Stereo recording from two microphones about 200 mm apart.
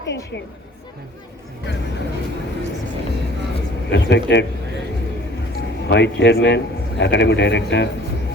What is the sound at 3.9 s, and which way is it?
Speech, 60° left (ahead or behind).